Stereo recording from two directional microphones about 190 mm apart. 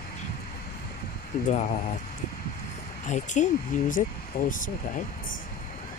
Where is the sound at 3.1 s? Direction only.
40° left (ahead or behind).